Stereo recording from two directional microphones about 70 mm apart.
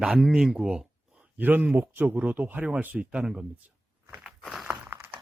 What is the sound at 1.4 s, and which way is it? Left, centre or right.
Speech, right.